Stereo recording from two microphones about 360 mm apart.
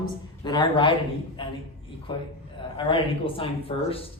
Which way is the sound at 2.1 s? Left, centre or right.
Centre.